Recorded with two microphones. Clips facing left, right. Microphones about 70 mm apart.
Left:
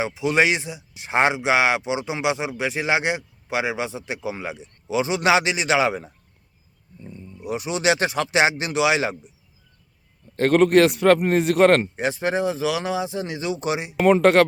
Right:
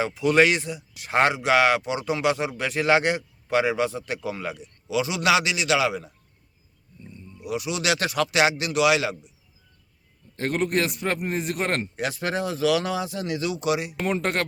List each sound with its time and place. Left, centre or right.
0.0 s speech: centre
10.3 s a man's voice: left
11.9 s speech: left